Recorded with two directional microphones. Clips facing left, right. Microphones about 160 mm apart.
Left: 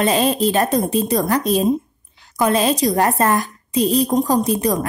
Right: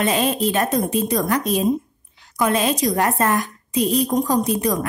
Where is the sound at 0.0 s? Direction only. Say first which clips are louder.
Left 3 dB; 35° left (ahead or behind).